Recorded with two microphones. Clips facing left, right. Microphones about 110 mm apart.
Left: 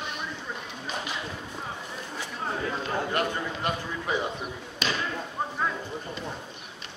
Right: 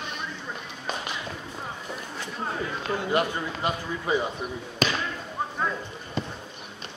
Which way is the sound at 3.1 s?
5° right (ahead or behind).